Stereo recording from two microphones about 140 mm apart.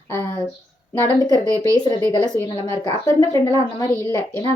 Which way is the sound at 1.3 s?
25° right (ahead or behind).